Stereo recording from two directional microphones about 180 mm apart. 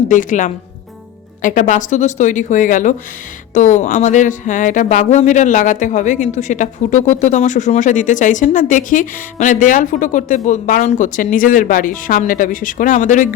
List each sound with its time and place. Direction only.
0.1 s speech: 45° left (ahead or behind)